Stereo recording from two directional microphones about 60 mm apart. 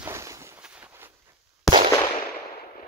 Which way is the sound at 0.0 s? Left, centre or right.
Right.